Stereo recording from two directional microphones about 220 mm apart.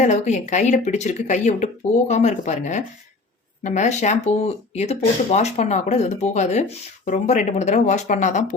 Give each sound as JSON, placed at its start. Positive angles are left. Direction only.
{"t": 0.0, "sound": "speech", "side_deg": 35}